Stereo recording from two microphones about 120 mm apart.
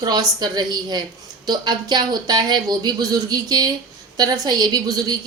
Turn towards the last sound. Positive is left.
turn(degrees=-35)  # may be behind; listen again after turning